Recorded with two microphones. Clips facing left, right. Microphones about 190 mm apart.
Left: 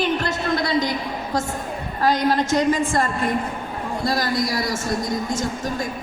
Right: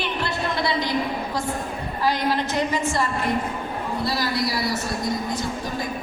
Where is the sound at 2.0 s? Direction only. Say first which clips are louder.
Left 4 dB; 45° left (ahead or behind).